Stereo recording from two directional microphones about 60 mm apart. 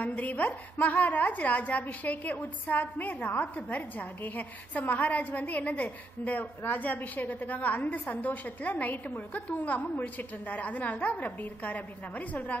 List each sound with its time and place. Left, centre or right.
0.0 s a woman's voice: left